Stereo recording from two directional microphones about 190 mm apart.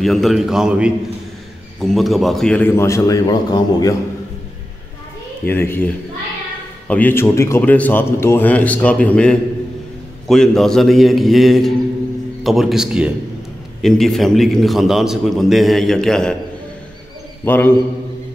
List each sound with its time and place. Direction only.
0.0 s a man's voice: centre (ahead or behind); by 3.9 s 20° left (ahead or behind)
5.5 s a man's voice: 10° left (ahead or behind)
6.9 s a man's voice: 10° left (ahead or behind)
17.5 s a man's voice: 10° left (ahead or behind)